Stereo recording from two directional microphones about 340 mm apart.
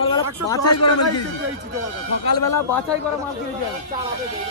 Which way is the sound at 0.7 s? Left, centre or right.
Left.